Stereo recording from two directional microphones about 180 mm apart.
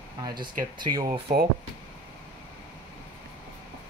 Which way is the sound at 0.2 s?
25° right (ahead or behind).